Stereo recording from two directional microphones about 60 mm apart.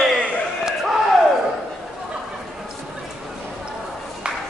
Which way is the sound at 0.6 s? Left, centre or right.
Centre.